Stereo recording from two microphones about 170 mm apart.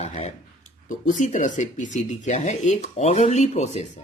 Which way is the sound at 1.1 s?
50° left (ahead or behind).